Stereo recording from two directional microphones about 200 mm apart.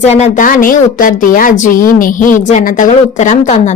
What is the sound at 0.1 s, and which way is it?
A woman's voice, 40° left (ahead or behind).